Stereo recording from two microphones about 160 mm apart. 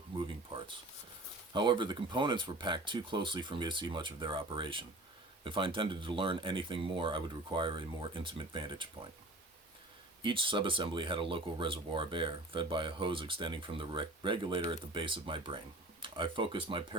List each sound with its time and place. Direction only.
0.2 s a sound: 30° right (ahead or behind)
1.5 s speech: 30° right (ahead or behind)
10.2 s speech: 30° right (ahead or behind)